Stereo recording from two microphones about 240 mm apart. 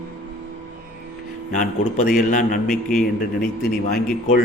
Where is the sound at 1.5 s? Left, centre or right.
Left.